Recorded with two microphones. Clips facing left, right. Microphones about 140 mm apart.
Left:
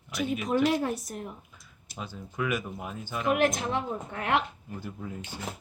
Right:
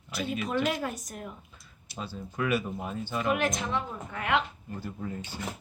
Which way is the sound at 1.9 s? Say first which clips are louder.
Even; 15° left (ahead or behind).